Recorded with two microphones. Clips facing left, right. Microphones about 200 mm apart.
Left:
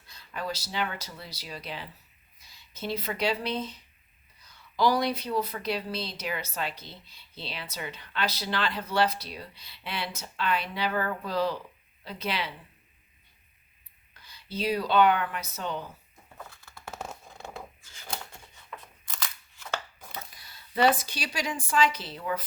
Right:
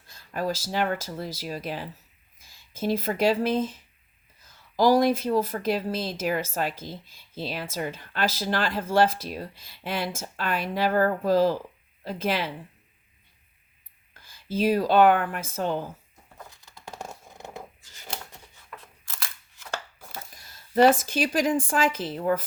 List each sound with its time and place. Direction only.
0.1 s a woman's voice: 45° right (ahead or behind)
14.1 s a sound: 45° right (ahead or behind)
14.5 s a woman's voice: 45° right (ahead or behind)
16.4 s scissors: 15° right (ahead or behind)
20.3 s a woman's voice: 45° right (ahead or behind)